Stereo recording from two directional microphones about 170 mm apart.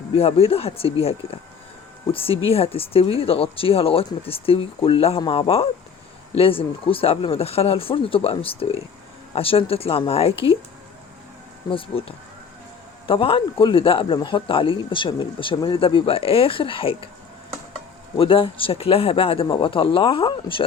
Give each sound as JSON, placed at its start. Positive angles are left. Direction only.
{"t": 0.2, "sound": "speech", "side_deg": 35}
{"t": 11.7, "sound": "speech", "side_deg": 35}
{"t": 18.2, "sound": "speech", "side_deg": 30}